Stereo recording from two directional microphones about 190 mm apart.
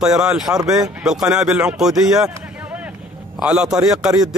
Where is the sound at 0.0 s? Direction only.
5° right (ahead or behind).